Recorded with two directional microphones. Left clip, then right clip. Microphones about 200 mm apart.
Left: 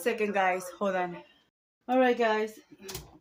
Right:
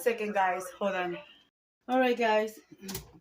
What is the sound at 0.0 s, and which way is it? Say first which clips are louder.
Speech: left 1 dB; 20° left (ahead or behind).